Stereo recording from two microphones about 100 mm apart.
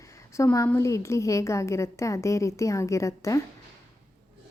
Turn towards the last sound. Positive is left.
turn(degrees=30)  # may be behind; listen again after turning